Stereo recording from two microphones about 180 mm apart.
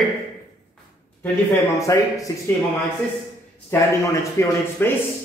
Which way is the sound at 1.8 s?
15° left (ahead or behind).